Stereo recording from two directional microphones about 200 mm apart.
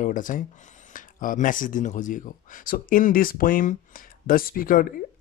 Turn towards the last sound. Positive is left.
turn(degrees=45)  # may be behind; listen again after turning